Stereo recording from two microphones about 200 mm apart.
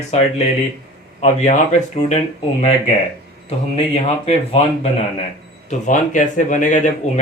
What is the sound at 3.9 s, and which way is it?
Speech, 30° left (ahead or behind).